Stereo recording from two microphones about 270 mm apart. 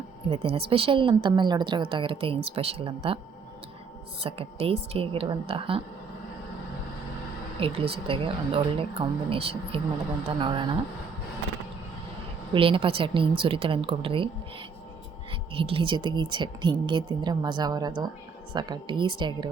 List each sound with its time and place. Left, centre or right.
0.3 s a woman's voice: right
4.2 s a woman's voice: right
7.6 s a woman's voice: right
12.5 s a woman's voice: centre
15.3 s speech: centre